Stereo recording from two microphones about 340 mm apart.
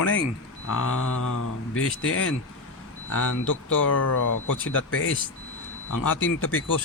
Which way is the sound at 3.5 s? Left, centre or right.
Left.